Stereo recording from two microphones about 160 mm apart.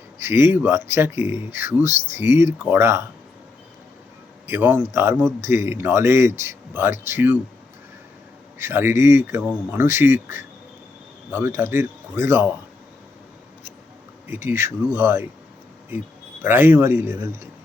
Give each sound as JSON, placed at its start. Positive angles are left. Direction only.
{"t": 0.2, "sound": "speech", "side_deg": -15}
{"t": 4.4, "sound": "speech", "side_deg": -15}
{"t": 8.5, "sound": "speech", "side_deg": -15}
{"t": 14.3, "sound": "speech", "side_deg": -15}